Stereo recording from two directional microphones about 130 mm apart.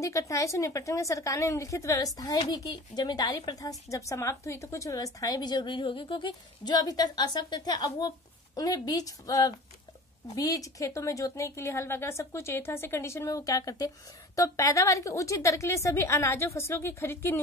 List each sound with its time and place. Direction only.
0.0 s a woman's voice: 25° left (ahead or behind)